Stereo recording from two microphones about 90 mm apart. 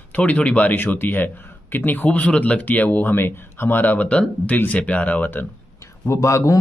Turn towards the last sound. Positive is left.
turn(degrees=35)  # may be behind; listen again after turning